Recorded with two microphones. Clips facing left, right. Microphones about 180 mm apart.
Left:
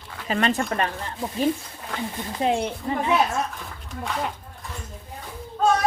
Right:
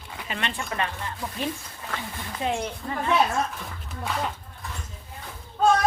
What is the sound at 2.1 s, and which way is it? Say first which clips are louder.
Speech: left 4 dB; 25° left (ahead or behind).